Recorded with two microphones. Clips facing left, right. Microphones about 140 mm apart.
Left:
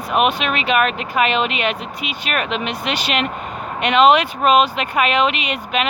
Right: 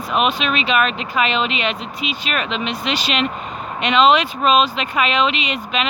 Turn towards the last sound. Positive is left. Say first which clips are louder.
# left 1 dB
turn(degrees=55)  # may be behind; listen again after turning